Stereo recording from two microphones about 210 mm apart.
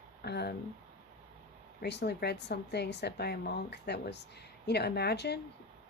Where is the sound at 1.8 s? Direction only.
50° left (ahead or behind).